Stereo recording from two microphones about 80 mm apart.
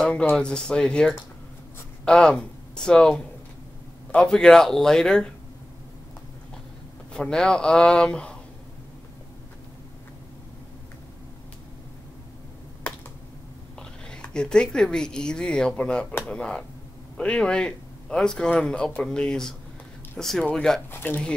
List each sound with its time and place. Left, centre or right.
0.0 s speech: centre
7.1 s speech: centre
13.7 s whispering: centre
14.3 s speech: centre
21.0 s speech: left